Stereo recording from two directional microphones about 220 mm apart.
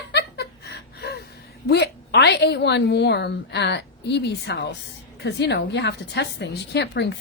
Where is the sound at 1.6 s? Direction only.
45° left (ahead or behind).